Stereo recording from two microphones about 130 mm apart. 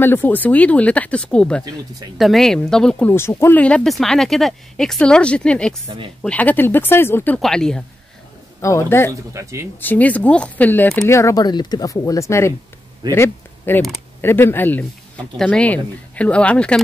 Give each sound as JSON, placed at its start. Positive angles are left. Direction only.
{"t": 0.0, "sound": "speech", "side_deg": 15}
{"t": 3.1, "sound": "speech", "side_deg": 20}
{"t": 7.3, "sound": "speech", "side_deg": 5}
{"t": 8.5, "sound": "speech", "side_deg": 20}
{"t": 9.3, "sound": "speech", "side_deg": -25}
{"t": 9.8, "sound": "speech", "side_deg": 15}